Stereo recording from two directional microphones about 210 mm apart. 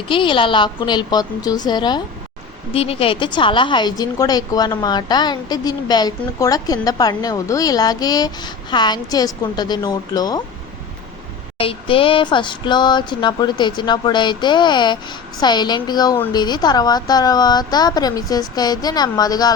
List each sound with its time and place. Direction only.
0.1 s a woman's voice: 25° left (ahead or behind)
11.5 s a woman's voice: 25° left (ahead or behind)